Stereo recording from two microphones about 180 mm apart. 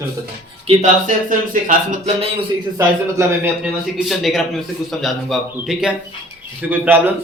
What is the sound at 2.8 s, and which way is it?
Speech, 15° right (ahead or behind).